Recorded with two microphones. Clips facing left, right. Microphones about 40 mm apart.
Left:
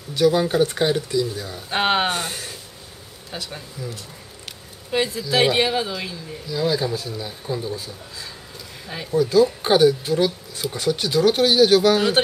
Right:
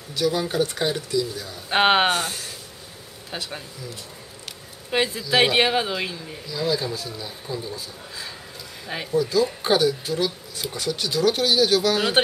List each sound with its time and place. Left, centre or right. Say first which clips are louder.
0.1 s speech: left 5 dB; centre
1.7 s speech: right 2 dB; centre
2.1 s speech: right 1 dB; centre
3.3 s speech: even; centre
4.9 s speech: even; centre
6.5 s speech: left 3 dB; centre
8.8 s speech: right 2 dB; centre
9.1 s speech: left 5 dB; centre